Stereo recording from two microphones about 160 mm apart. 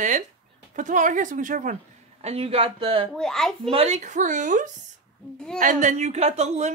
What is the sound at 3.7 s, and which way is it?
Speech, 40° right (ahead or behind).